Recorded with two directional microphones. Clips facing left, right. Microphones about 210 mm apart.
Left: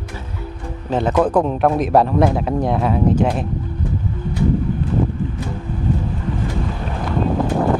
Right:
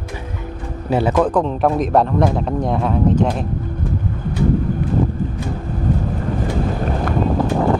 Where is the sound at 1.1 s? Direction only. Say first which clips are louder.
Left 1 dB; 10° left (ahead or behind).